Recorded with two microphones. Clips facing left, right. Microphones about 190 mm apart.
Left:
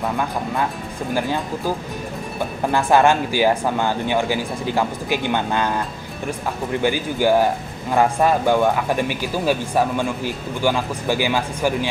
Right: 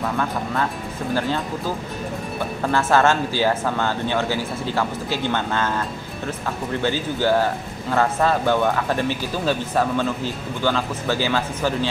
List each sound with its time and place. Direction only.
0.0 s speech: 15° left (ahead or behind)
2.7 s speech: 15° left (ahead or behind)
6.8 s speech: 15° left (ahead or behind)